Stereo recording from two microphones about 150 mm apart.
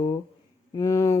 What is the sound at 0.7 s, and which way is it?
Speech, 20° left (ahead or behind).